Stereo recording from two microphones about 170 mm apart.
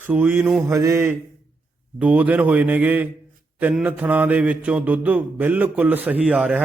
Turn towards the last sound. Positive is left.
turn(degrees=-5)  # may be behind; listen again after turning